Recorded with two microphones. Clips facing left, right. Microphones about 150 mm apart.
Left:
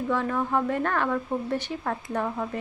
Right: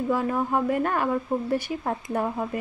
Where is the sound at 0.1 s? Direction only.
10° right (ahead or behind).